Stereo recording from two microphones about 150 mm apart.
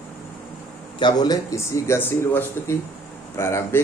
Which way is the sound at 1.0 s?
25° left (ahead or behind).